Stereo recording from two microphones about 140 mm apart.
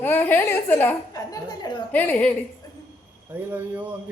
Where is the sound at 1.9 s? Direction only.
10° left (ahead or behind).